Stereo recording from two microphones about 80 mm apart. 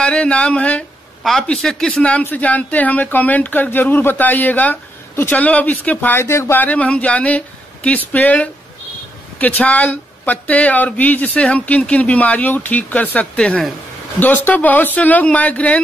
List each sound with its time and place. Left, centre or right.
0.0 s speech: centre
1.2 s speech: centre; by 6.2 s left
6.2 s speech: left
6.6 s speech: centre